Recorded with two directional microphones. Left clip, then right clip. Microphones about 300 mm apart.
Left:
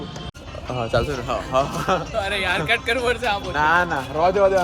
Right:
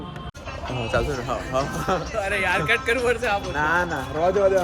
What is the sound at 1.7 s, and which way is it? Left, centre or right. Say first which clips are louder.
Speech: left 3 dB; centre.